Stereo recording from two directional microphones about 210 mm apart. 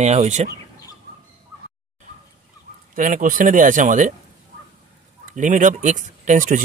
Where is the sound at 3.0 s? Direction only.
40° right (ahead or behind).